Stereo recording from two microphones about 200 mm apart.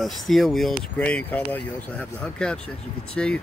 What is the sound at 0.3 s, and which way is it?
Speech, centre (ahead or behind).